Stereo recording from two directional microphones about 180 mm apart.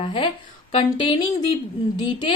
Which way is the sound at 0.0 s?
30° left (ahead or behind).